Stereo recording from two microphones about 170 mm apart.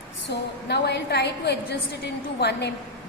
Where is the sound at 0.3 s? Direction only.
80° left.